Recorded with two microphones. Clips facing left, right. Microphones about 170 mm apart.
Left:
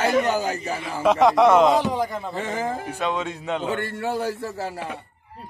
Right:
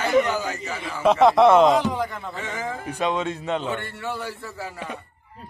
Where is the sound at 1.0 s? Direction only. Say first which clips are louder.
Right 1 dB; 10° left (ahead or behind).